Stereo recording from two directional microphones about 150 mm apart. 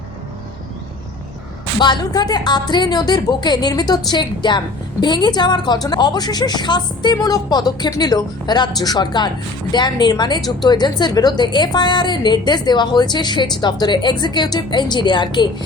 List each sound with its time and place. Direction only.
1.8 s speech: 30° left (ahead or behind)